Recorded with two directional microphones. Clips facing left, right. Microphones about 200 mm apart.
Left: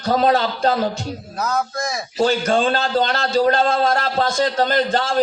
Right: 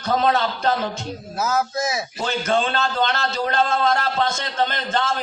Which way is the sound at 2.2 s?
35° left (ahead or behind).